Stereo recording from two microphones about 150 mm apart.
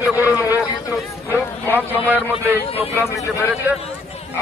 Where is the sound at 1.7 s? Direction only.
10° right (ahead or behind).